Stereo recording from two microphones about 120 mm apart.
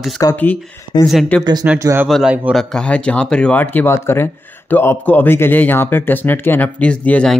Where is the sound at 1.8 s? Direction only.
20° right (ahead or behind).